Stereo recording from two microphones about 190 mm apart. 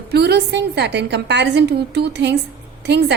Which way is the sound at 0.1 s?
60° right (ahead or behind).